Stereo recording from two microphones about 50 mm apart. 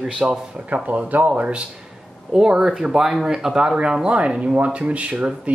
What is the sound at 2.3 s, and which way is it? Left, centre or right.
Speech, centre.